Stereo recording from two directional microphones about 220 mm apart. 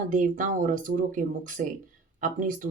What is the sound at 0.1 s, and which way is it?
Speech, 35° right (ahead or behind).